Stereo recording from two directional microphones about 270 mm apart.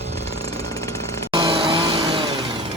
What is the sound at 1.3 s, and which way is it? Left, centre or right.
Vehicle, centre.